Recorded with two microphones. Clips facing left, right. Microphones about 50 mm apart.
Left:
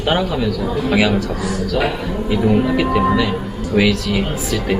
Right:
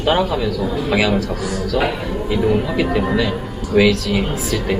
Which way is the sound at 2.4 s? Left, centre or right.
Centre.